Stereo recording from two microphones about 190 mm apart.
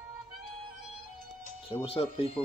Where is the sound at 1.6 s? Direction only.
30° left (ahead or behind).